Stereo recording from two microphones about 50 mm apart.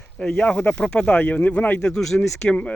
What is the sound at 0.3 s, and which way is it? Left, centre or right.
Speech, left.